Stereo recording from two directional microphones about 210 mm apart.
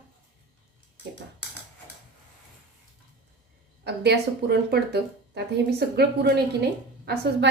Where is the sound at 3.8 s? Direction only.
50° right (ahead or behind).